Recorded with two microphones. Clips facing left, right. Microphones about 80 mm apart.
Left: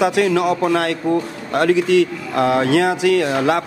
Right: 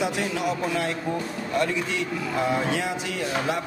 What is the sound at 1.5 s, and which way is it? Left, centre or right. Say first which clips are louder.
Speech: left 12 dB; left.